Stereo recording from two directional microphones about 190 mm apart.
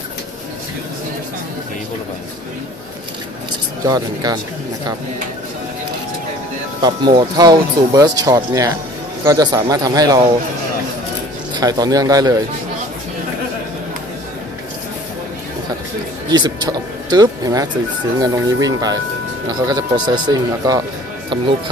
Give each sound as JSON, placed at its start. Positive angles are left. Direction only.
{"t": 3.8, "sound": "speech", "side_deg": -20}
{"t": 6.8, "sound": "speech", "side_deg": -25}
{"t": 11.5, "sound": "speech", "side_deg": -20}
{"t": 16.3, "sound": "speech", "side_deg": -20}